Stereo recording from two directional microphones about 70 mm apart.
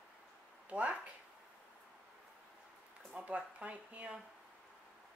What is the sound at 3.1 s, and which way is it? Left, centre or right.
Speech, centre.